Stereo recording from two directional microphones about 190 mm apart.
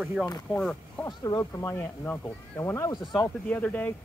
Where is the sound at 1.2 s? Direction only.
15° left (ahead or behind).